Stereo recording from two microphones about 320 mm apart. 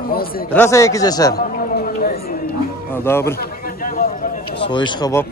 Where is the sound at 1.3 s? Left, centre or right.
Left.